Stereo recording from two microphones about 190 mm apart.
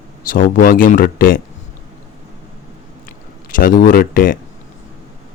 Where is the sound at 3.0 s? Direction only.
45° left (ahead or behind).